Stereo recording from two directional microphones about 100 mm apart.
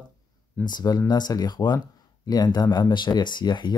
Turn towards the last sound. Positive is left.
turn(degrees=50)  # may be behind; listen again after turning